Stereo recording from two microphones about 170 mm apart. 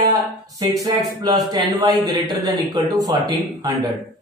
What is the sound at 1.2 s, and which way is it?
Speech, 25° right (ahead or behind).